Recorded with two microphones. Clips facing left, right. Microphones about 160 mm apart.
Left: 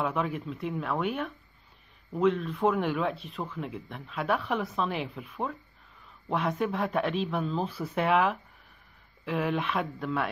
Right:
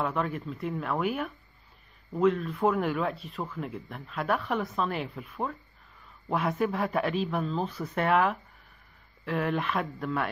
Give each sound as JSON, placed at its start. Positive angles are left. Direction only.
{"t": 0.0, "sound": "speech", "side_deg": 0}